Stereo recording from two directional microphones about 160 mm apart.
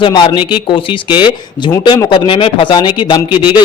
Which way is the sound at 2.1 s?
30° left (ahead or behind).